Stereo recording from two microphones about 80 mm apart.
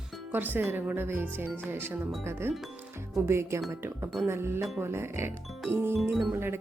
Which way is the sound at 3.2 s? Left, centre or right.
Right.